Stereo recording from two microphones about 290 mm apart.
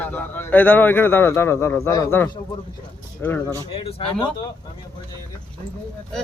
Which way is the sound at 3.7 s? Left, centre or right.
Centre.